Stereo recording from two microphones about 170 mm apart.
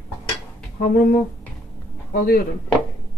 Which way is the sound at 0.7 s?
60° left (ahead or behind).